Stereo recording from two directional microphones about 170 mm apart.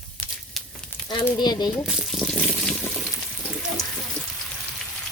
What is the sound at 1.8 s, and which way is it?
Frying, centre (ahead or behind).